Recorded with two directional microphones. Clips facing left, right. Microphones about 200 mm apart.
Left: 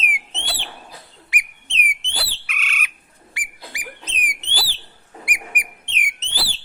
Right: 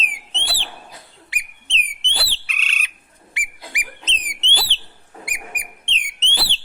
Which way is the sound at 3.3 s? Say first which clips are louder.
Right 2 dB; 20° right (ahead or behind).